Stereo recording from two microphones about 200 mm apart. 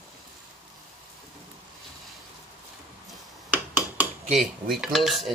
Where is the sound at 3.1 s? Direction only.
10° right (ahead or behind).